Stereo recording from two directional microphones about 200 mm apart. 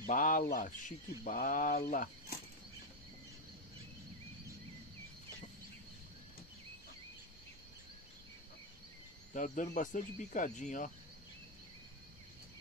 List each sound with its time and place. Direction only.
0.0 s speech: 40° left (ahead or behind)
9.3 s speech: 40° left (ahead or behind)